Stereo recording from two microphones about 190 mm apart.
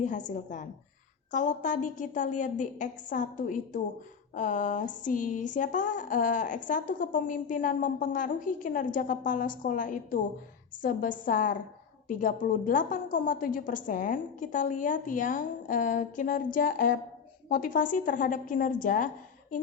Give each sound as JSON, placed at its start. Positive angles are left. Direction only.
{"t": 0.0, "sound": "a woman's voice", "side_deg": 40}